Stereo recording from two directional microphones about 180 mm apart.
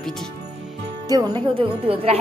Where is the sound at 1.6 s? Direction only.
30° right (ahead or behind).